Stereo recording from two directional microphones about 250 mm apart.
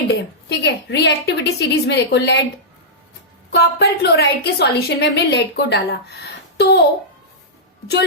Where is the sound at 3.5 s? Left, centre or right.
Left.